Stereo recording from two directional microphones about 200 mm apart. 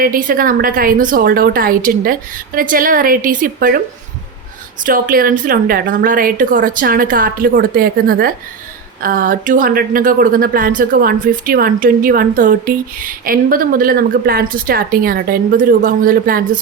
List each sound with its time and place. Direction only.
0.0 s a woman's voice: 45° right (ahead or behind)
4.8 s a woman's voice: 45° right (ahead or behind)